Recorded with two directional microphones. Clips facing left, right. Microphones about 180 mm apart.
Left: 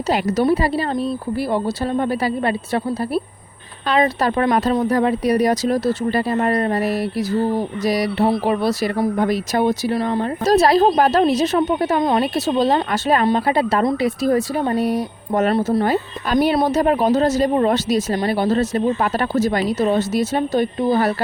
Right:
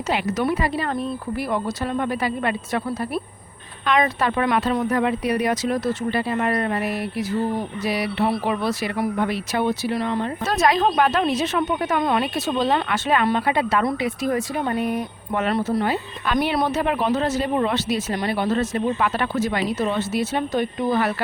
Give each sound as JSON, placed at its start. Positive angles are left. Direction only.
{"t": 0.1, "sound": "speech", "side_deg": 35}